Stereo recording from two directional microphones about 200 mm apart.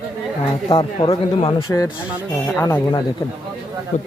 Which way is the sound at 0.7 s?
25° left (ahead or behind).